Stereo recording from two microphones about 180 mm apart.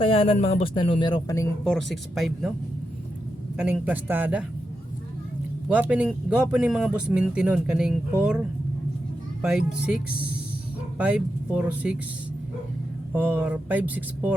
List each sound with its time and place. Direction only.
0.0 s speech: 30° left (ahead or behind)
1.6 s speech: centre (ahead or behind)
3.6 s speech: 5° right (ahead or behind)
5.6 s speech: 5° right (ahead or behind)
13.1 s speech: 10° right (ahead or behind)